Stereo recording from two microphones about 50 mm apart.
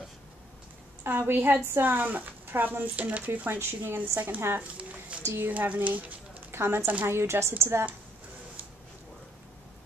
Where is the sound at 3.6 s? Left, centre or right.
Right.